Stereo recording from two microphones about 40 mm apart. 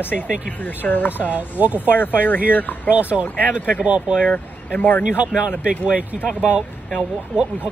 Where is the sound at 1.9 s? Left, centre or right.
Left.